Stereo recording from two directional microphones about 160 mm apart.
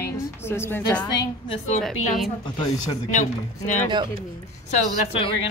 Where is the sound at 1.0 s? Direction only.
30° left (ahead or behind).